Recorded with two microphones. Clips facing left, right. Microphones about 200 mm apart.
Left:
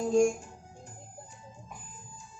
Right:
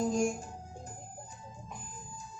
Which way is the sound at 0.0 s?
40° right (ahead or behind).